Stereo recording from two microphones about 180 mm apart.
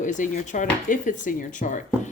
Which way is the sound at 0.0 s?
45° left (ahead or behind).